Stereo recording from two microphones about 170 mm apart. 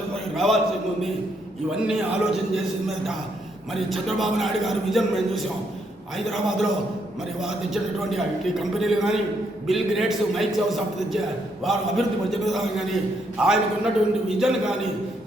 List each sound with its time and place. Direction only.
0.3 s a man's voice: centre (ahead or behind)
1.9 s a man's voice: centre (ahead or behind)
3.7 s a man's voice: centre (ahead or behind)